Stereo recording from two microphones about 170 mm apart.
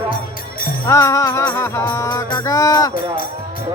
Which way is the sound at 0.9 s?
20° left (ahead or behind).